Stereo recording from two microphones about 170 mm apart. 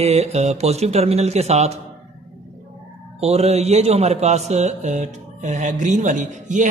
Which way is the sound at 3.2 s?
40° right (ahead or behind).